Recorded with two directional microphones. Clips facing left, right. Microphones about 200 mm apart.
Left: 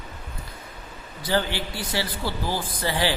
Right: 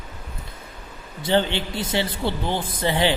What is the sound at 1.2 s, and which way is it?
Speech, 25° right (ahead or behind).